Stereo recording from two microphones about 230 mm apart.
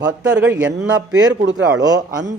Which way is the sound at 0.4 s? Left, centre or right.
Centre.